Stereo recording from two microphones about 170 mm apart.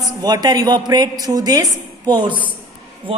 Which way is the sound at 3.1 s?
35° right (ahead or behind).